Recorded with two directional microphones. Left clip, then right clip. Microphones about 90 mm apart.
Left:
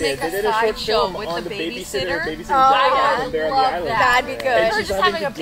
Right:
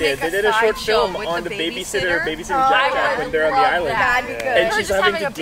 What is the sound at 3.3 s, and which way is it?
Speech, 10° right (ahead or behind).